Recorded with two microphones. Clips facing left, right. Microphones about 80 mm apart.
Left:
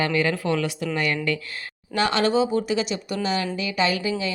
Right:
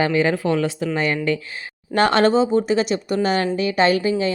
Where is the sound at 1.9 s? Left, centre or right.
Right.